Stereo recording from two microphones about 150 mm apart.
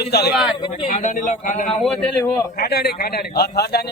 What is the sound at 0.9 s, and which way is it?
Speech, 60° left (ahead or behind).